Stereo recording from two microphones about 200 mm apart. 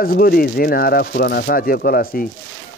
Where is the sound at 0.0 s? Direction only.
50° left (ahead or behind).